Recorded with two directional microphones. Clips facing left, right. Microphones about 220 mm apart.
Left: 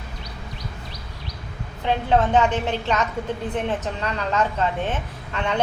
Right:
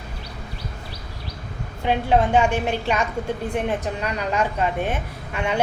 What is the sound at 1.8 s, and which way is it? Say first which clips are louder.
A woman's voice: right 1 dB; 15° right (ahead or behind).